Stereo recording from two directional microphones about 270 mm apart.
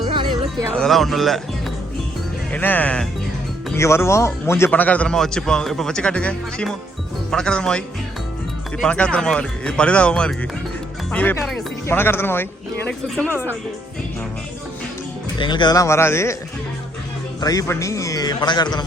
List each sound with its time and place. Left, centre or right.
0.1 s music: centre
0.8 s a man's voice: centre
2.5 s a man's voice: centre
8.8 s a man's voice: centre
15.4 s a man's voice: centre
17.4 s a man's voice: centre